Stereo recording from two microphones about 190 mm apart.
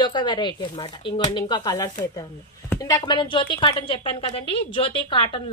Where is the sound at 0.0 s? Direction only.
25° left (ahead or behind).